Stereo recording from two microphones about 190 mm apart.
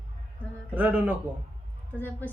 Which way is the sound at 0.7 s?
10° right (ahead or behind).